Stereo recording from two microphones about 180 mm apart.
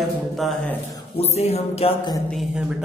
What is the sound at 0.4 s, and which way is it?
Speech, centre (ahead or behind).